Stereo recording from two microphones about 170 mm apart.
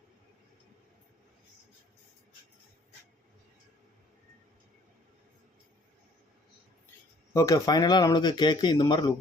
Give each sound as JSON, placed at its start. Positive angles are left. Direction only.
{"t": 7.3, "sound": "speech", "side_deg": 20}